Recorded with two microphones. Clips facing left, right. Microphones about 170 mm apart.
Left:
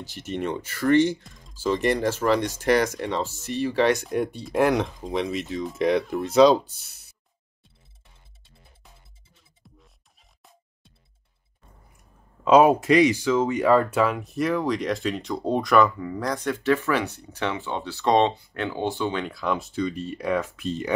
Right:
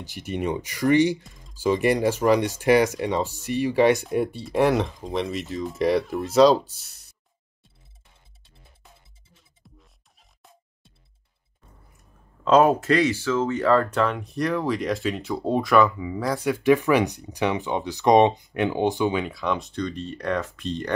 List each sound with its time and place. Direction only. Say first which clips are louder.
0.0 s speech: right 1 dB; 15° right (ahead or behind); by 7.2 s centre (ahead or behind)
9.6 s music: right 1 dB; centre (ahead or behind)
12.4 s speech: left 1 dB; 10° left (ahead or behind); by 19.2 s 15° right (ahead or behind)
19.2 s speech: even; centre (ahead or behind)